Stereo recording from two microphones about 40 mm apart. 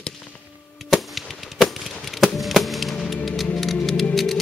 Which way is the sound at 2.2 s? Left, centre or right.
Centre.